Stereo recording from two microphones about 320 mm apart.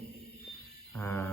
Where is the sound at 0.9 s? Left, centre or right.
Centre.